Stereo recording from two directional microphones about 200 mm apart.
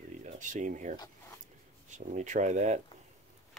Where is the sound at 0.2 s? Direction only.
40° right (ahead or behind).